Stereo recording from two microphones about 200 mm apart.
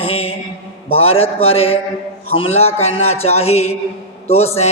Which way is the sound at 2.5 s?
30° left (ahead or behind).